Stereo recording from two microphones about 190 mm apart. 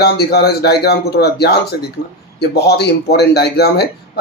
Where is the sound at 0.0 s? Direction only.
55° left (ahead or behind).